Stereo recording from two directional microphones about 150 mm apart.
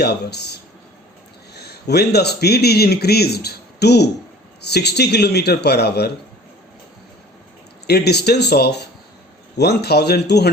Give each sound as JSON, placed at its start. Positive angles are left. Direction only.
{"t": 0.0, "sound": "speech", "side_deg": 90}
{"t": 1.5, "sound": "speech", "side_deg": 90}
{"t": 7.9, "sound": "speech", "side_deg": 90}